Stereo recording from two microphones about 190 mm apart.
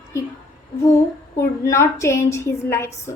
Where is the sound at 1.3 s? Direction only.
15° left (ahead or behind).